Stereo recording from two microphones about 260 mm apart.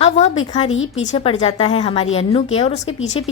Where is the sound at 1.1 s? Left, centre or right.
Left.